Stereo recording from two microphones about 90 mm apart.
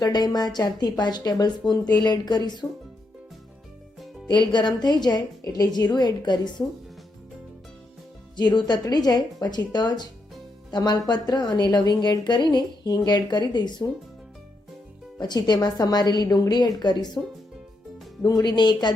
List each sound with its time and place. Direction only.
0.0 s a woman's voice: 50° left (ahead or behind)
4.3 s a woman's voice: 55° left (ahead or behind)
8.4 s a woman's voice: 55° left (ahead or behind)
15.2 s a woman's voice: 50° left (ahead or behind)
18.2 s a woman's voice: 50° left (ahead or behind)